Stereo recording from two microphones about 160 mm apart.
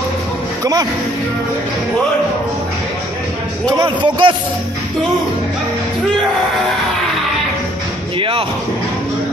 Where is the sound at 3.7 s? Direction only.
25° right (ahead or behind).